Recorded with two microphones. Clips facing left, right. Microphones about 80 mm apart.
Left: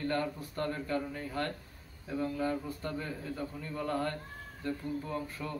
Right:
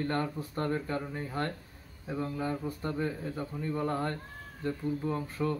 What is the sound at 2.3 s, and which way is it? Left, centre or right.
Mantra, right.